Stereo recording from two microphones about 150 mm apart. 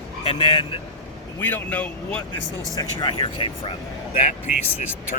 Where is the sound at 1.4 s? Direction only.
10° left (ahead or behind).